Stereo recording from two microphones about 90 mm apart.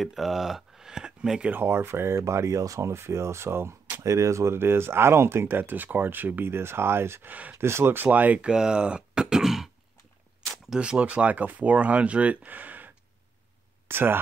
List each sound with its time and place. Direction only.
0.0 s speech: centre (ahead or behind)
1.5 s speech: 25° right (ahead or behind)
7.5 s speech: 30° right (ahead or behind)